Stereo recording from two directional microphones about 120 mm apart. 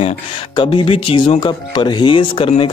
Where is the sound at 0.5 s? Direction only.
45° left (ahead or behind).